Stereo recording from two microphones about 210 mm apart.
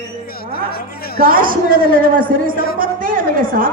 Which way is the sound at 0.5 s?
45° left (ahead or behind).